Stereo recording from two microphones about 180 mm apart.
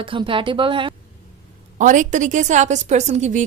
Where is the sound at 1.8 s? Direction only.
45° right (ahead or behind).